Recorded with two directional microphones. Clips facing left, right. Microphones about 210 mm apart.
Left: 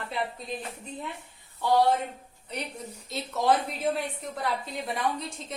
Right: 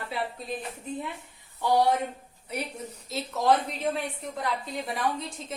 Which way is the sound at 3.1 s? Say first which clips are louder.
Even; centre (ahead or behind).